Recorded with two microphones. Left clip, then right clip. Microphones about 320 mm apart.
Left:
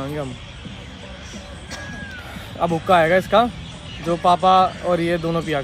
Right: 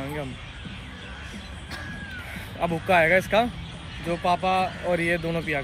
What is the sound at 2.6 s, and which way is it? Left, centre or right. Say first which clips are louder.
A man's voice: left 5 dB; centre.